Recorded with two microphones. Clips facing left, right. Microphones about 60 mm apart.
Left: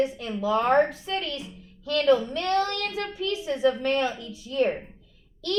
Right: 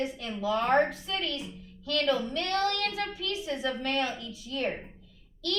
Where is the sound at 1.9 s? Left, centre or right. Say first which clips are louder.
Left 6 dB; left.